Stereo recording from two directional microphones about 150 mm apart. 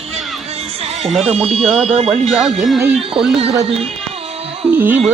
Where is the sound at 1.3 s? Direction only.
45° right (ahead or behind).